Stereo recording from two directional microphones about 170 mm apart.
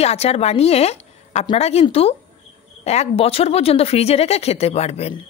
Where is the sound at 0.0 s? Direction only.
35° left (ahead or behind).